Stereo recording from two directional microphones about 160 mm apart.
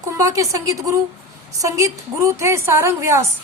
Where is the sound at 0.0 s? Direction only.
20° right (ahead or behind).